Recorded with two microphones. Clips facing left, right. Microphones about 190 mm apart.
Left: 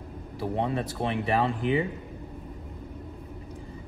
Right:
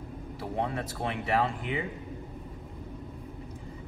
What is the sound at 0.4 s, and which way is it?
Speech, 20° left (ahead or behind).